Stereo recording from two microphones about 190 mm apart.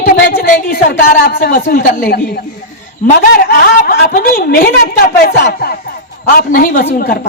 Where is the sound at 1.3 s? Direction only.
50° left (ahead or behind).